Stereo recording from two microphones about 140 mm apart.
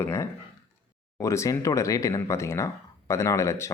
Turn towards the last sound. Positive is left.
turn(degrees=20)  # may be behind; listen again after turning